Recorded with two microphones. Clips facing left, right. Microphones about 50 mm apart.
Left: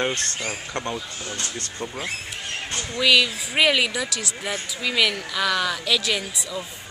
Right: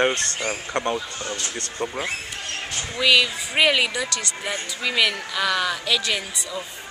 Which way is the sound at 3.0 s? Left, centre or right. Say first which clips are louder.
Even; centre.